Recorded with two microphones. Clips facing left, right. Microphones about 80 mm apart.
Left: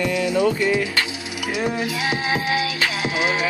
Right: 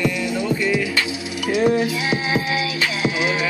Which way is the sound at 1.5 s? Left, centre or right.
Centre.